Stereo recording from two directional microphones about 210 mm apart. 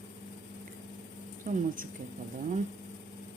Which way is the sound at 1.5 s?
40° right (ahead or behind).